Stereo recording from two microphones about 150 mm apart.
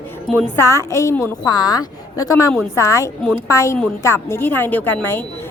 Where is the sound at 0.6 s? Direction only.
20° left (ahead or behind).